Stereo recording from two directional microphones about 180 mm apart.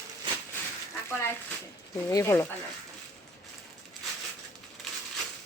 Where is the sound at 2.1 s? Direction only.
15° left (ahead or behind).